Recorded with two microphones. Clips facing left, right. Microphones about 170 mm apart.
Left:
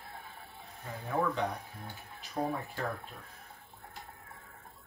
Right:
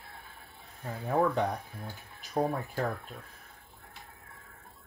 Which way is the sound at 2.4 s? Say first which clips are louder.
Right 4 dB; 40° right (ahead or behind).